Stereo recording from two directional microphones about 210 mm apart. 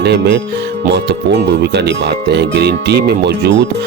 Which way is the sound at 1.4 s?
55° right (ahead or behind).